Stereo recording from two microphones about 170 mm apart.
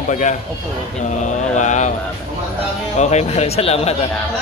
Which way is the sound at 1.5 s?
45° left (ahead or behind).